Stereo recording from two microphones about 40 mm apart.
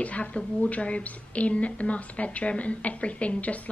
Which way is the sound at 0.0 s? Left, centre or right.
Left.